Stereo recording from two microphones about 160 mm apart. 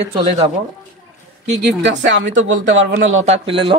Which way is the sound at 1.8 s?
90° right.